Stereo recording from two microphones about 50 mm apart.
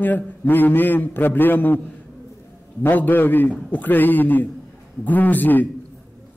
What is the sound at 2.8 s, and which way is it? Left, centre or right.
A man's voice, left.